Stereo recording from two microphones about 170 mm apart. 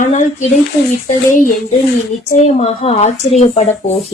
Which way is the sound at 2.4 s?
35° left (ahead or behind).